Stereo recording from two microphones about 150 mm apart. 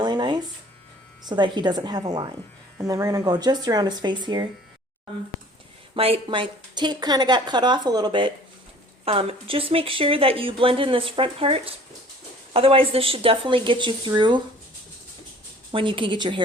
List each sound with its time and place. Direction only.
0.0 s a sound: 30° right (ahead or behind)
1.3 s a woman's voice: 30° right (ahead or behind)
5.9 s a woman's voice: 35° right (ahead or behind)
15.7 s speech: 35° right (ahead or behind)